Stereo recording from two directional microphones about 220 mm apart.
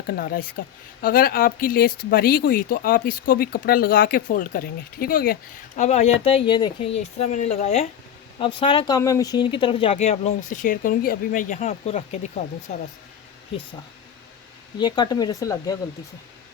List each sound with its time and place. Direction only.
0.1 s speech: 40° left (ahead or behind)
14.8 s speech: 20° left (ahead or behind)